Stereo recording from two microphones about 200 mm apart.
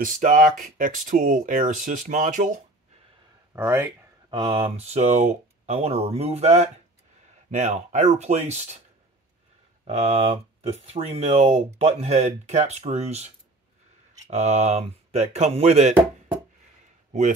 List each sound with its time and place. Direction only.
0.0 s speech: 40° right (ahead or behind)
3.5 s a sound: 10° right (ahead or behind)
4.4 s speech: 30° right (ahead or behind)
9.8 s speech: 30° right (ahead or behind)